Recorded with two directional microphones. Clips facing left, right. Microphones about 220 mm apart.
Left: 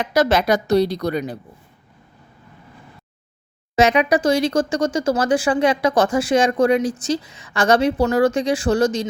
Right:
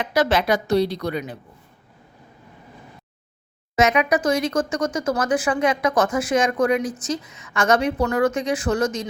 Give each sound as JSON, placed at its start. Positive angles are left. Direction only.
{"t": 0.0, "sound": "a woman's voice", "side_deg": 40}
{"t": 3.8, "sound": "a woman's voice", "side_deg": 30}